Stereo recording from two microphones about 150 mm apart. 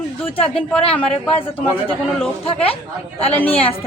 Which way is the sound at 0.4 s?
5° left (ahead or behind).